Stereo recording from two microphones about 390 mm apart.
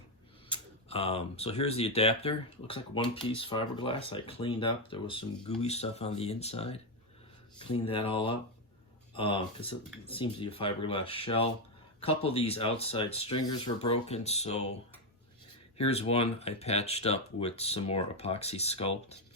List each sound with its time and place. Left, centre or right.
0.5 s speech: centre
15.8 s speech: centre